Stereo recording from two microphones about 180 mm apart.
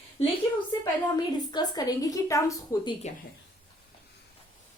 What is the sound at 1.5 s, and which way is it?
A woman's voice, 25° left (ahead or behind).